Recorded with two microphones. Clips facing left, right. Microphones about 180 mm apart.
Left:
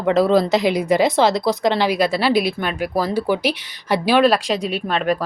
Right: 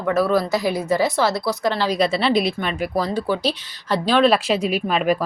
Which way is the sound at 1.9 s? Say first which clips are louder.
Left 1 dB; centre (ahead or behind).